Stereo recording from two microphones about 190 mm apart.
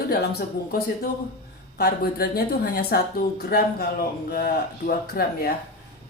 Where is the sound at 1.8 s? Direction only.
55° left (ahead or behind).